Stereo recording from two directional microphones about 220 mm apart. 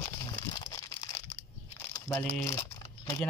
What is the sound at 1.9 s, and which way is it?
Speech, 15° left (ahead or behind).